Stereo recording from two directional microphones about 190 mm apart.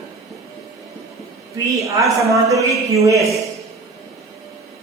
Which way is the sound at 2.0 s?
15° right (ahead or behind).